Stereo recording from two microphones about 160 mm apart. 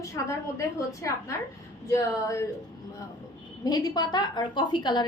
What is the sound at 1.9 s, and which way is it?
Speech, 20° left (ahead or behind).